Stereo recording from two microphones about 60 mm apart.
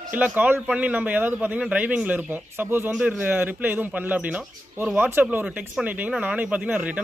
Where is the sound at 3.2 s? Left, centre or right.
Right.